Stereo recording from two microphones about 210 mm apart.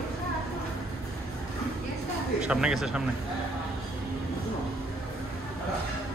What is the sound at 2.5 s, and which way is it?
Speech, 5° right (ahead or behind).